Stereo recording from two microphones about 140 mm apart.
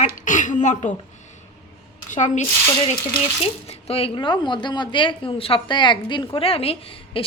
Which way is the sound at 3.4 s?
45° left (ahead or behind).